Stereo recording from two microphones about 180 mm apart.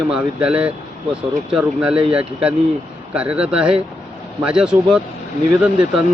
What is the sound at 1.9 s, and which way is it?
Speech, 30° right (ahead or behind).